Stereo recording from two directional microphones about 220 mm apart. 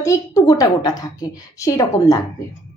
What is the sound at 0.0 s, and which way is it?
A woman's voice, 15° left (ahead or behind).